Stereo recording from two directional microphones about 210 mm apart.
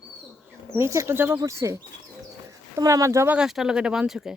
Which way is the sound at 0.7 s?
15° right (ahead or behind).